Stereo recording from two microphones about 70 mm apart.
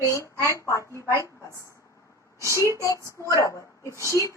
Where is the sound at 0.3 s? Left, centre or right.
Right.